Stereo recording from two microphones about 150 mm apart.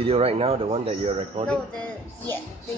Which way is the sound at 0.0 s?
40° right (ahead or behind).